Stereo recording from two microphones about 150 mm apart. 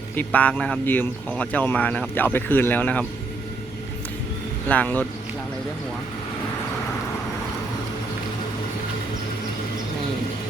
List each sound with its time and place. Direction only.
0.2 s speech: 10° left (ahead or behind)
4.7 s speech: 10° left (ahead or behind)